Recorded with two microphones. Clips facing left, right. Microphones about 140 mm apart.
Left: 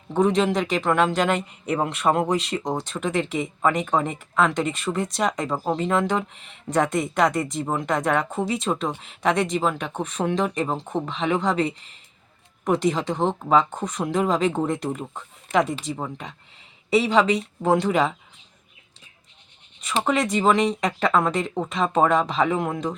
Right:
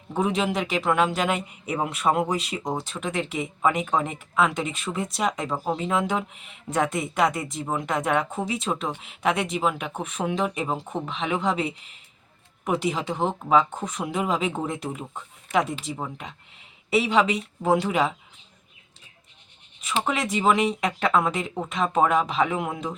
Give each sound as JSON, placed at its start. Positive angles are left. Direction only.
{"t": 0.1, "sound": "speech", "side_deg": -5}
{"t": 20.1, "sound": "speech", "side_deg": -5}